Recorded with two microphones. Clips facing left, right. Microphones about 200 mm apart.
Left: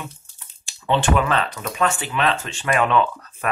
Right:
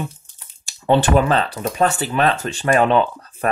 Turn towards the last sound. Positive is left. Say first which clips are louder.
# right 3 dB
turn(degrees=-35)  # may be behind; listen again after turning